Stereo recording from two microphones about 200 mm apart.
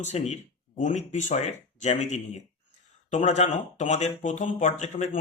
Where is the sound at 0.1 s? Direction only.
30° left (ahead or behind).